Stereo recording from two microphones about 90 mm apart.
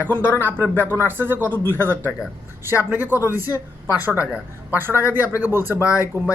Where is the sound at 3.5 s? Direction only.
35° left (ahead or behind).